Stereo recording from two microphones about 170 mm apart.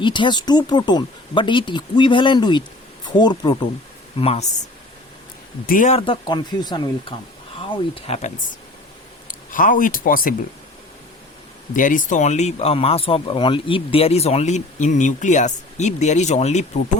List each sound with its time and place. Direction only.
0.0 s speech: 30° left (ahead or behind)
4.2 s speech: 35° left (ahead or behind)
5.6 s speech: 50° left (ahead or behind)
6.0 s speech: 30° left (ahead or behind)
9.2 s speech: 50° left (ahead or behind)
11.7 s speech: 50° left (ahead or behind)